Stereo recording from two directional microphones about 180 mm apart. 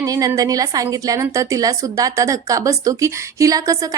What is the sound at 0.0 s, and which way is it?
A woman's voice, 20° right (ahead or behind).